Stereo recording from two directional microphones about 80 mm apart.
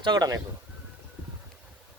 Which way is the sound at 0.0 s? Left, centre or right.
Right.